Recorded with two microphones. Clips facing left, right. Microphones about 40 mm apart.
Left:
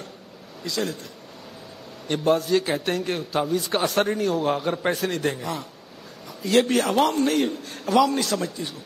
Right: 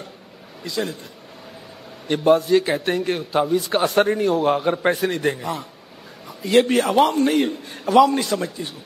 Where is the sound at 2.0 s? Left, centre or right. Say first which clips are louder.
Right 5 dB; centre.